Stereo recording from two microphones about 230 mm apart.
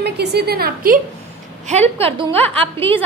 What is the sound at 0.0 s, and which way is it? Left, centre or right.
A woman's voice, right.